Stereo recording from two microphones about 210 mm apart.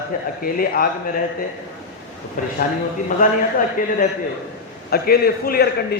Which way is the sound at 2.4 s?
40° left (ahead or behind).